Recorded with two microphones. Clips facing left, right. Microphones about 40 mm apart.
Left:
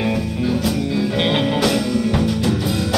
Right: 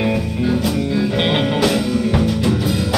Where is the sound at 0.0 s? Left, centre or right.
Centre.